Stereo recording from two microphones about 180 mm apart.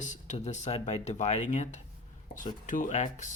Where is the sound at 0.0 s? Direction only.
40° left (ahead or behind).